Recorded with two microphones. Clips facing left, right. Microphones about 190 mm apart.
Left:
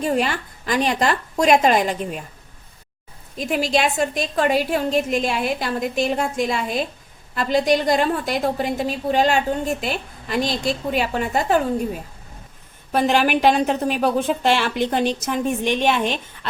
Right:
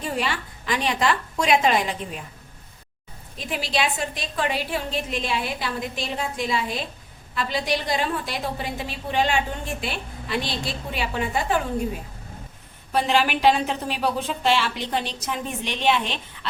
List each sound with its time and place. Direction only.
0.0 s a woman's voice: 45° left (ahead or behind)
3.3 s a woman's voice: 45° left (ahead or behind)
12.9 s a woman's voice: 50° left (ahead or behind)